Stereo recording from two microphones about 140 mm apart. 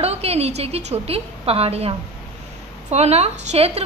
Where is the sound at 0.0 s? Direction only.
45° right (ahead or behind).